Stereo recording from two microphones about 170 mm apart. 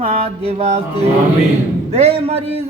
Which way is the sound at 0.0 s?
35° right (ahead or behind).